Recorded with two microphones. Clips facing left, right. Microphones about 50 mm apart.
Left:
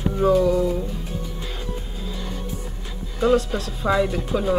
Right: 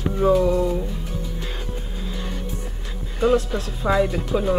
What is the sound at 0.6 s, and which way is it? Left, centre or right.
Speech, centre.